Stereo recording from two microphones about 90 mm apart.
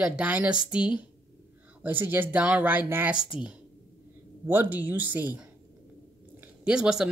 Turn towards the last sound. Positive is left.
turn(degrees=-10)  # may be behind; listen again after turning